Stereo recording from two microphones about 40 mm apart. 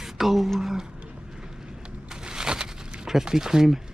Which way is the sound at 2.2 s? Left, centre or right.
Centre.